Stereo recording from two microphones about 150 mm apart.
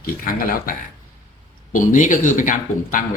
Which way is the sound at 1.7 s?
60° left (ahead or behind).